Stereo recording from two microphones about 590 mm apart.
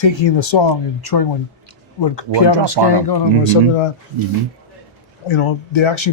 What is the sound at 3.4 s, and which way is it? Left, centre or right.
Speech, left.